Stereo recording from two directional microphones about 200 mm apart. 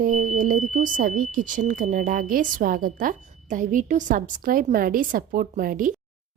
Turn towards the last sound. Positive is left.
turn(degrees=-45)  # may be behind; listen again after turning